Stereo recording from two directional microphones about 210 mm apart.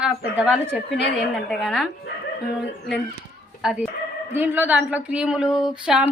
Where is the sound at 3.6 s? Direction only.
5° right (ahead or behind).